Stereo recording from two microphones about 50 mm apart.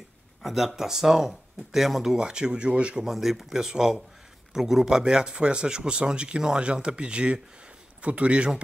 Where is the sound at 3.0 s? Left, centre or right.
Centre.